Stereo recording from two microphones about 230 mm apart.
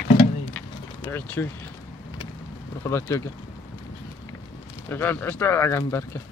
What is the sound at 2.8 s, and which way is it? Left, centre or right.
Speech, centre.